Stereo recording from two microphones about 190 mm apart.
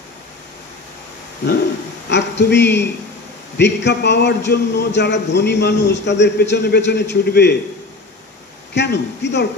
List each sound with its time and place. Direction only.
2.0 s a man's voice: 65° left (ahead or behind)
8.7 s a man's voice: 65° left (ahead or behind)